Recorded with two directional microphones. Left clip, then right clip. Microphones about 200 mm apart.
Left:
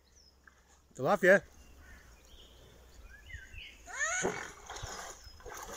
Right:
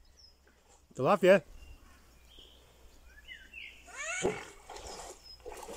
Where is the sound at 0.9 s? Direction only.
5° right (ahead or behind).